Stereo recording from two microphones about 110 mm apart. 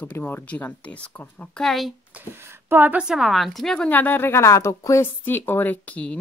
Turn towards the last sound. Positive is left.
turn(degrees=15)  # may be behind; listen again after turning